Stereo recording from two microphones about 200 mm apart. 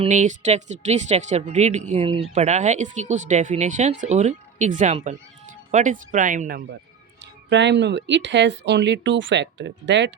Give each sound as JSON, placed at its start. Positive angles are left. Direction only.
{"t": 0.0, "sound": "speech", "side_deg": -40}
{"t": 7.2, "sound": "speech", "side_deg": -60}